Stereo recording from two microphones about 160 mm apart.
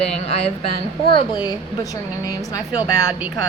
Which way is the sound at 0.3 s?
40° left (ahead or behind).